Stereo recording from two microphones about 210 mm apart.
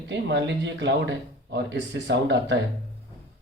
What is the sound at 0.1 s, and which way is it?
Speech, 60° right (ahead or behind).